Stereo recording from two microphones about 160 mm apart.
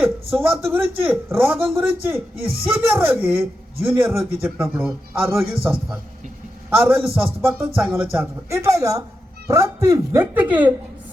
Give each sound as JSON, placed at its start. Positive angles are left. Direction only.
{"t": 0.0, "sound": "a man's voice", "side_deg": -15}
{"t": 2.3, "sound": "speech", "side_deg": -70}
{"t": 2.6, "sound": "a man's voice", "side_deg": -15}
{"t": 6.7, "sound": "a man's voice", "side_deg": -15}